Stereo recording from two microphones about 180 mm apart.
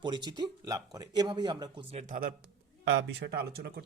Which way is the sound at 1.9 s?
35° right (ahead or behind).